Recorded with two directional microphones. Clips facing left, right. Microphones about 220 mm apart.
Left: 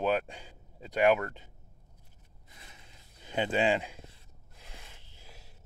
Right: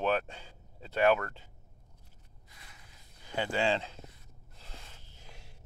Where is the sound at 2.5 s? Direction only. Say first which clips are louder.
Left 3 dB; 25° left (ahead or behind).